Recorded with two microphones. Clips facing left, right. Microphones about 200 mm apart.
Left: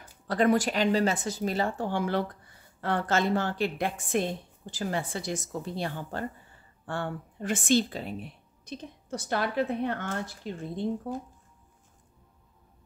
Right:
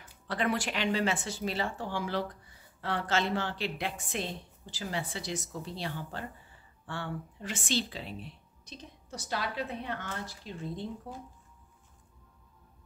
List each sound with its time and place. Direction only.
0.3 s a woman's voice: 40° left (ahead or behind)